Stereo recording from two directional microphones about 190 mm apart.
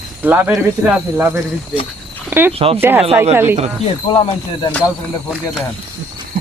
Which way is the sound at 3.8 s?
30° left (ahead or behind).